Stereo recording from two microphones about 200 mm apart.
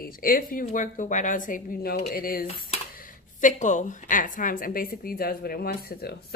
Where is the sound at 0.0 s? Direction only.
45° left (ahead or behind).